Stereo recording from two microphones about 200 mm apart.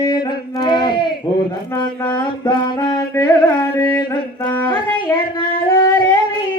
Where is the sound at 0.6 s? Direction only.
20° left (ahead or behind).